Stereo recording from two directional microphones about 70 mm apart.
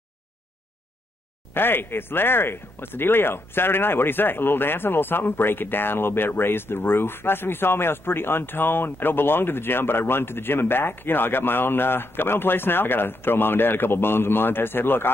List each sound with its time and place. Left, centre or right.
1.5 s speech: left